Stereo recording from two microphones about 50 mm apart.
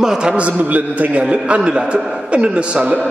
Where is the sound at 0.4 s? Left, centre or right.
Right.